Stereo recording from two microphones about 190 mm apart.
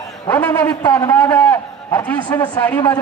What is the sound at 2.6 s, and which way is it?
Speech, 10° left (ahead or behind).